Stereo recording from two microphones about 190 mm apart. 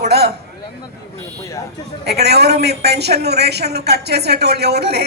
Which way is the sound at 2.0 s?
60° right (ahead or behind).